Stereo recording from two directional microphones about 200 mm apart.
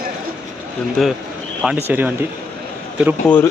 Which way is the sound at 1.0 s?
Centre (ahead or behind).